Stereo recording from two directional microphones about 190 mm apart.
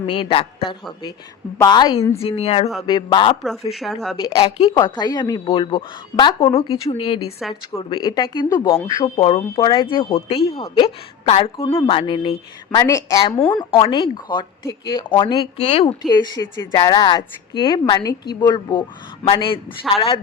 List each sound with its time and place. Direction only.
0.0 s speech: 30° left (ahead or behind)
1.5 s a woman's voice: 20° left (ahead or behind)
3.7 s speech: centre (ahead or behind)
4.2 s speech: 20° left (ahead or behind)
7.3 s speech: centre (ahead or behind)
7.8 s a woman's voice: 25° left (ahead or behind)
15.5 s speech: 35° left (ahead or behind)